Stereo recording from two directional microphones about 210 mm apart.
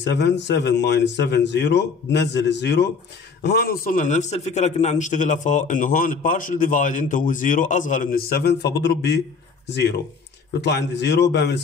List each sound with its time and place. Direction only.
0.0 s a man's voice: 55° left (ahead or behind)